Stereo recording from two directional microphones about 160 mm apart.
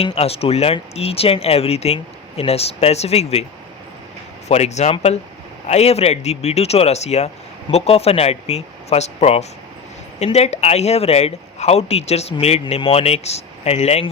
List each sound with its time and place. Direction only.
0.0 s speech: 40° left (ahead or behind)
4.4 s speech: 45° left (ahead or behind)